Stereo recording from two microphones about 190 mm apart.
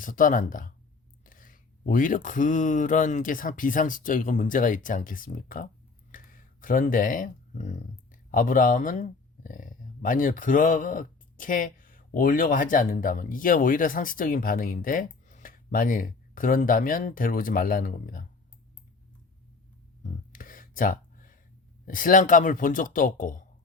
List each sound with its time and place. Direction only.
0.0 s speech: 45° left (ahead or behind)
20.0 s a sound: 45° left (ahead or behind)
21.8 s speech: 45° left (ahead or behind)